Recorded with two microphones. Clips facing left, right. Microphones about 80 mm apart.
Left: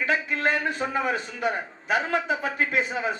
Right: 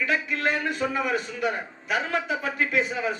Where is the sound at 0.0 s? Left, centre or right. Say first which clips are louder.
Left 1 dB; left.